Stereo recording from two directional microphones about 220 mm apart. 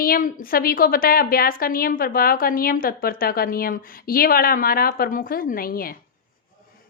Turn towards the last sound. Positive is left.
turn(degrees=40)  # may be behind; listen again after turning